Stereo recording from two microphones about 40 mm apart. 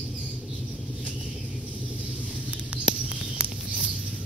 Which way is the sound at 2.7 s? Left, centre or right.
Right.